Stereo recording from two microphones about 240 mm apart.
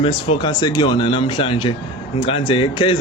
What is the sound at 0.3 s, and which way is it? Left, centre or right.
Speech, centre.